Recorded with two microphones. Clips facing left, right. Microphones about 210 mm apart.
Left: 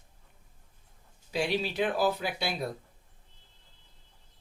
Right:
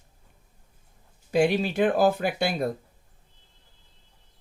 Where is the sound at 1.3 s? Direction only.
50° right (ahead or behind).